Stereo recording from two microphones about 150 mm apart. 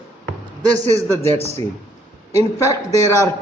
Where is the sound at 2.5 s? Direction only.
20° left (ahead or behind).